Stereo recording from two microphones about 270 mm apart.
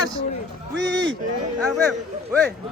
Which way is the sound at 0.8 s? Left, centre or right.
Right.